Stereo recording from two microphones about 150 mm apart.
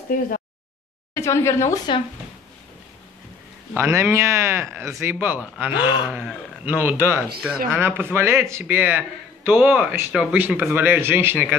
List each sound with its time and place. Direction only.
0.1 s a sound: 70° left (ahead or behind)
1.1 s speech: 20° left (ahead or behind)
3.7 s a man's voice: 15° right (ahead or behind)
5.8 s speech: 30° left (ahead or behind)
6.0 s a man's voice: 10° right (ahead or behind)